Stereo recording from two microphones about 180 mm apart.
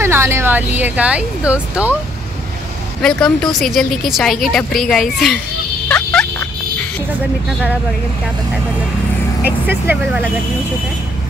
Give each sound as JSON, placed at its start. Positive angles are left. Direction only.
{"t": 0.0, "sound": "speech", "side_deg": -15}
{"t": 3.0, "sound": "a woman's voice", "side_deg": 5}
{"t": 5.9, "sound": "fowl", "side_deg": 5}
{"t": 9.4, "sound": "speech", "side_deg": -10}